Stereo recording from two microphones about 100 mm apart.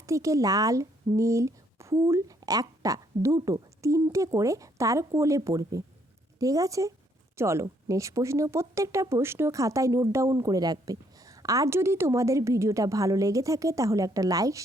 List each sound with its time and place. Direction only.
0.0 s speech: 30° right (ahead or behind)